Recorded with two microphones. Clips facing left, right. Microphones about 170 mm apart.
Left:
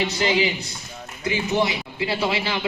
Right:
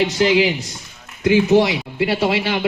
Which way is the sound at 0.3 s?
70° right (ahead or behind).